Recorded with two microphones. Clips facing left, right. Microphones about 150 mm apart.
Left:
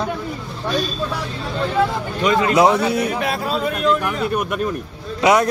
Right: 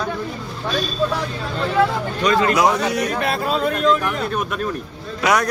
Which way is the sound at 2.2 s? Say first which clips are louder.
Left 2 dB; 20° left (ahead or behind).